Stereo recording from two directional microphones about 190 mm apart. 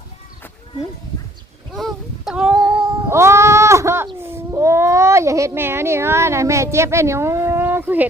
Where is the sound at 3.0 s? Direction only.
15° right (ahead or behind).